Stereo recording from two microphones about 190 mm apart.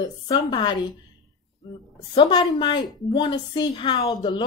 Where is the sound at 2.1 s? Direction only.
25° left (ahead or behind).